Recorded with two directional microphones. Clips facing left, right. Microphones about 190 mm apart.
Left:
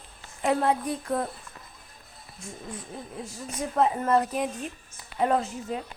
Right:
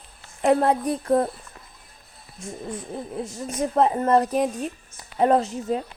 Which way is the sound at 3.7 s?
40° right (ahead or behind).